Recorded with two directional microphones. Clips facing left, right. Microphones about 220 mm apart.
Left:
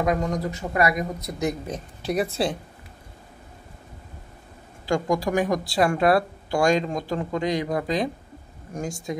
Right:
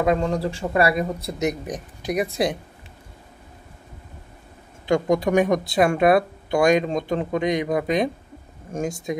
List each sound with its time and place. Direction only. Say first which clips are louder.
0.0 s speech: right 3 dB; 30° right (ahead or behind)
4.8 s speech: right 4 dB; 20° right (ahead or behind)